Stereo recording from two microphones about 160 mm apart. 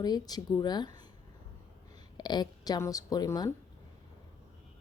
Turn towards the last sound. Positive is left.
turn(degrees=20)  # may be behind; listen again after turning